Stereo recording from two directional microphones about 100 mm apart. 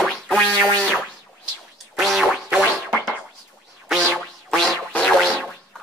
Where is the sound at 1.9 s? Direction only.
Centre (ahead or behind).